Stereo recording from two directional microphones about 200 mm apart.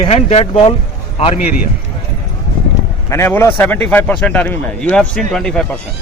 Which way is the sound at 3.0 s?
15° left (ahead or behind).